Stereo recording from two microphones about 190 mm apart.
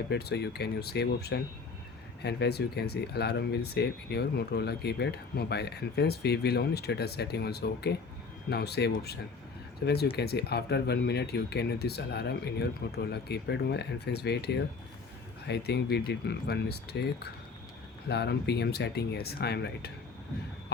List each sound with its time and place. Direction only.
0.1 s speech: 60° left (ahead or behind)
18.1 s speech: 60° left (ahead or behind)